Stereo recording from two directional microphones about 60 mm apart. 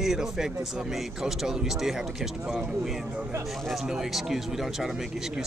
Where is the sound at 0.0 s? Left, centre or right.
Centre.